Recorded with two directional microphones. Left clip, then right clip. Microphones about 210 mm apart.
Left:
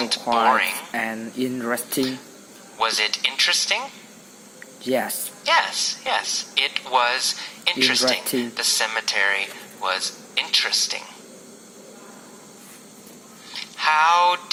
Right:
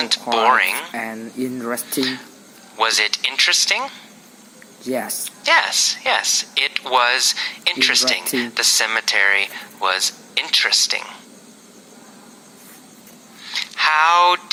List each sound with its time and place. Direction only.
0.0 s speech: 30° right (ahead or behind)
0.9 s speech: centre (ahead or behind)
2.7 s speech: 30° right (ahead or behind)
4.9 s a woman's voice: 10° left (ahead or behind)
5.5 s speech: 30° right (ahead or behind)
13.5 s speech: 30° right (ahead or behind)